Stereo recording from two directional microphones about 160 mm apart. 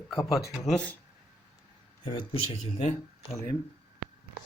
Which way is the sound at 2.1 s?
40° left (ahead or behind).